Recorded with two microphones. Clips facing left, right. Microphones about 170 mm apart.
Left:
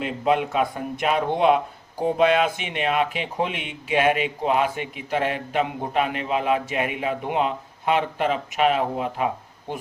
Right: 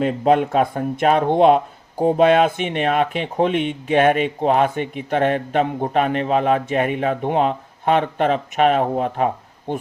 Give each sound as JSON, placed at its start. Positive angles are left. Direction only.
{"t": 0.0, "sound": "speech", "side_deg": -45}